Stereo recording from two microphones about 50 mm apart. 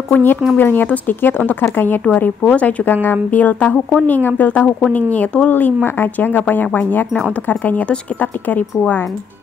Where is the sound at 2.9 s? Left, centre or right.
Left.